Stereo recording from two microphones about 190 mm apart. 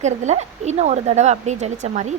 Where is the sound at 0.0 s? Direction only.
35° right (ahead or behind).